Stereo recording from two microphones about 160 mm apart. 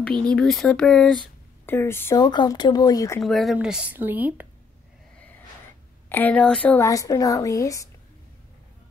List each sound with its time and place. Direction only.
0.3 s speech: centre (ahead or behind)
1.7 s speech: 15° left (ahead or behind)
3.2 s a woman's voice: centre (ahead or behind)
6.0 s a woman's voice: 10° left (ahead or behind)
6.9 s speech: 20° left (ahead or behind)